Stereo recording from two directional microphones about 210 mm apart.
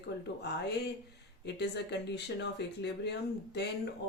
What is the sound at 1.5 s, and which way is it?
Speech, 55° left (ahead or behind).